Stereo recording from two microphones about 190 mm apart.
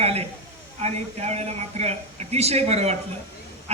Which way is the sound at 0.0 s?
35° right (ahead or behind).